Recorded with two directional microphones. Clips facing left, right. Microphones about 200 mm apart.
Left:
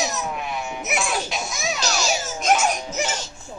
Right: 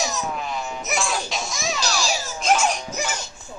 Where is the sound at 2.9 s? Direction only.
25° left (ahead or behind).